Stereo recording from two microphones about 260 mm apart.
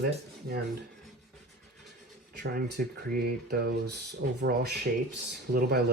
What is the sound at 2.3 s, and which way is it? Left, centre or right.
Speech, right.